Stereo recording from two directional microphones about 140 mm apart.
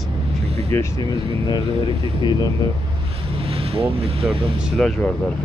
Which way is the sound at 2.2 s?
30° left (ahead or behind).